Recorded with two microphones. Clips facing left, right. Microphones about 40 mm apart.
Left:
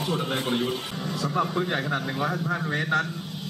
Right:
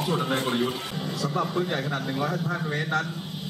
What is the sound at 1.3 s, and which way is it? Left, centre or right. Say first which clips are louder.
A man's voice: left 1 dB; centre.